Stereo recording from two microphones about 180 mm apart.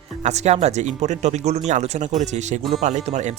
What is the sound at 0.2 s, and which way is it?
Speech, 40° right (ahead or behind).